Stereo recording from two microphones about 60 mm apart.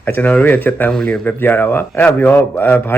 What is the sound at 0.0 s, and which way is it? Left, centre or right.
Speech, left.